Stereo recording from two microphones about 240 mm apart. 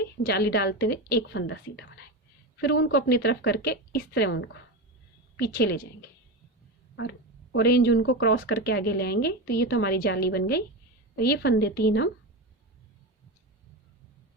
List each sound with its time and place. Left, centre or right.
0.3 s a woman's voice: left